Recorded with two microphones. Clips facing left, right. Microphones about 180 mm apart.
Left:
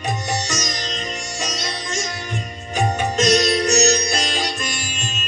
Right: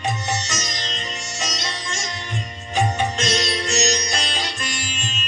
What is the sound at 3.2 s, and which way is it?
Music, 40° left (ahead or behind).